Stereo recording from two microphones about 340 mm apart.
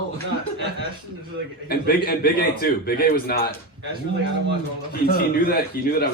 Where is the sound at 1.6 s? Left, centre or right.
Left.